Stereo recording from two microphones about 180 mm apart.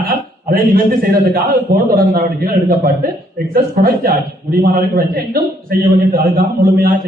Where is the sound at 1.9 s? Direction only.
50° right (ahead or behind).